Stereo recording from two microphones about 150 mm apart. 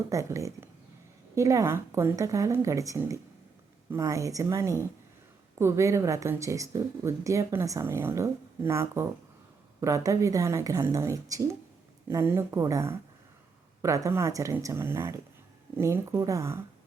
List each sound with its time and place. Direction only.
0.1 s speech: 20° right (ahead or behind)